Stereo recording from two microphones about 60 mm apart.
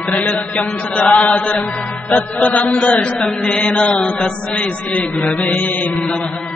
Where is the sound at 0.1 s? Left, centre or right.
Left.